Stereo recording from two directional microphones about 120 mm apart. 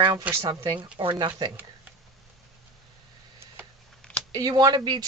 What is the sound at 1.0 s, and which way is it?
Speech, 40° right (ahead or behind).